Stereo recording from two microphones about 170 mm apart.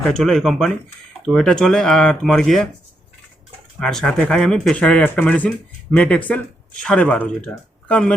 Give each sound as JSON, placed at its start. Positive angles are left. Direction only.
{"t": 0.0, "sound": "speech", "side_deg": 0}
{"t": 3.8, "sound": "speech", "side_deg": 0}